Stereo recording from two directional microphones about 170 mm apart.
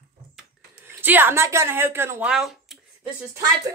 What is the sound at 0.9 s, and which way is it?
Speech, 10° right (ahead or behind).